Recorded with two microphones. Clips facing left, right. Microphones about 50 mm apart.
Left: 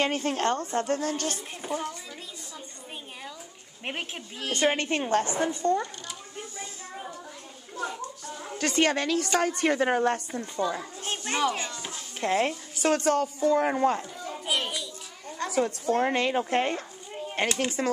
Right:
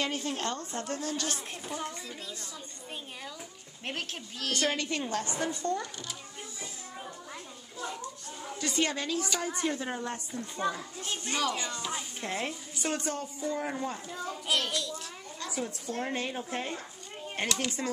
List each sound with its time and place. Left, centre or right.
0.0 s a woman's voice: left
1.6 s a woman's voice: left
3.8 s a woman's voice: left
4.7 s a woman's voice: left
5.5 s speech: centre
8.5 s a woman's voice: left
11.0 s a sound: left
11.3 s a woman's voice: left
12.2 s a woman's voice: left
14.2 s children playing: centre
15.2 s a sound: left
15.5 s a woman's voice: left
17.5 s a woman's voice: left